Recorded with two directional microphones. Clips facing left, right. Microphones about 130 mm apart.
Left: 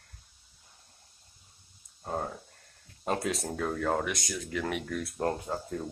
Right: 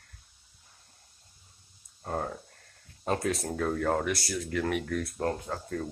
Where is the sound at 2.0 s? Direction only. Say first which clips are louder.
Right 1 dB; 5° left (ahead or behind).